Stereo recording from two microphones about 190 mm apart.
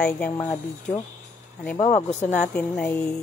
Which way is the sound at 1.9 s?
40° left (ahead or behind).